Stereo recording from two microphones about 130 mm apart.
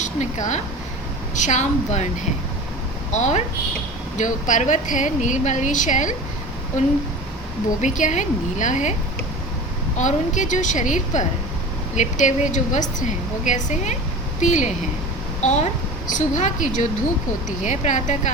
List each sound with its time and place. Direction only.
0.0 s speech: 70° left (ahead or behind)
3.1 s speech: 65° left (ahead or behind)
7.8 s speech: 70° left (ahead or behind)
10.0 s speech: 70° left (ahead or behind)
16.1 s speech: 75° left (ahead or behind)